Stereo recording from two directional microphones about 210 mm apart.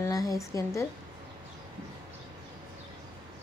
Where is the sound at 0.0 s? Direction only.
15° left (ahead or behind).